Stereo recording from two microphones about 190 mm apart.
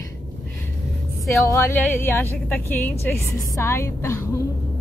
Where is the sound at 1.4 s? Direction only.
10° left (ahead or behind).